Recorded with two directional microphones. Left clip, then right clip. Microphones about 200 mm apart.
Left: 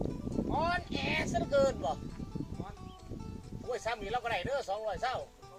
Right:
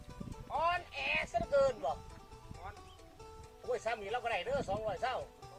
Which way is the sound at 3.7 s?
35° left (ahead or behind).